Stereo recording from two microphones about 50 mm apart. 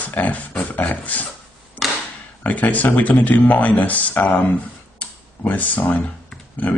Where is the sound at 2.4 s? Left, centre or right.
Left.